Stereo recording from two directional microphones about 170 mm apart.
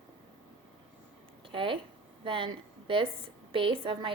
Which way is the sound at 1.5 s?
30° right (ahead or behind).